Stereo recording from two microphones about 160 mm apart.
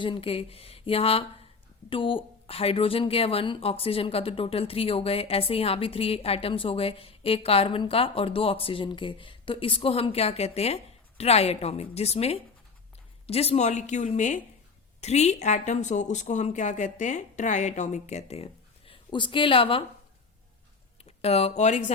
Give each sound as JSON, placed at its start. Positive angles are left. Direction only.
{"t": 0.0, "sound": "a woman's voice", "side_deg": 35}
{"t": 18.9, "sound": "speech", "side_deg": 30}
{"t": 21.0, "sound": "speech", "side_deg": 40}